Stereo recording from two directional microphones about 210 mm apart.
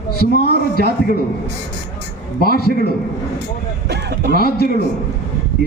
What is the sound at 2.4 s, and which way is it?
Speech, 45° left (ahead or behind).